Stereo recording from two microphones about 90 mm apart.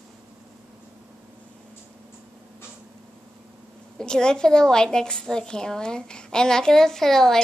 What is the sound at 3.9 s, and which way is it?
A woman's voice, 10° left (ahead or behind).